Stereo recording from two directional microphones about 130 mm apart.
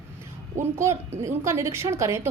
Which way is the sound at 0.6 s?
20° right (ahead or behind).